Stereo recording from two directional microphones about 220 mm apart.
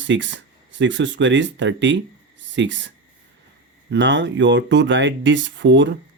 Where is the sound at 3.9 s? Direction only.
55° right (ahead or behind).